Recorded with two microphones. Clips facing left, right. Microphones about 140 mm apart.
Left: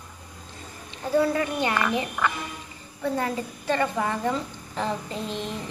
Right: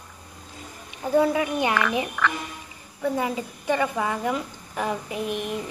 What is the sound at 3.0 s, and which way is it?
Speech, 10° right (ahead or behind).